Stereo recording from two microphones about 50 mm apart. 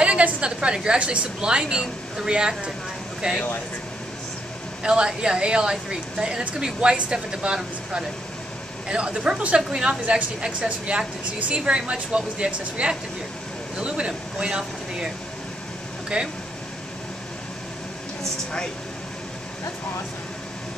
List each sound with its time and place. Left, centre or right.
0.0 s a woman's voice: right
4.8 s a woman's voice: centre
11.3 s a woman's voice: right
16.1 s a woman's voice: centre